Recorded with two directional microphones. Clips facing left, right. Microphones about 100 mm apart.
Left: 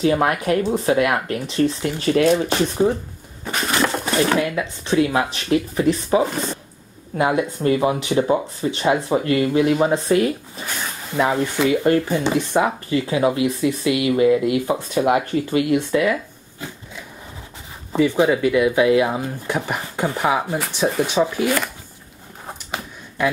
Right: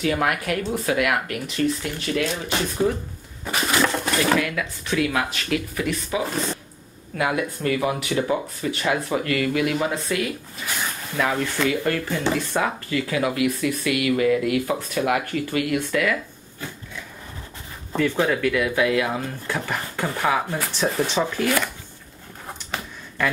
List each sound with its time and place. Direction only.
0.0 s speech: 30° left (ahead or behind)
3.4 s a sound: centre (ahead or behind)
3.7 s pigeon: 15° left (ahead or behind)
4.2 s speech: 25° left (ahead or behind)
7.2 s speech: 25° left (ahead or behind)
11.1 s speech: 25° left (ahead or behind)
17.9 s speech: 15° left (ahead or behind)
22.7 s a sound: 10° left (ahead or behind)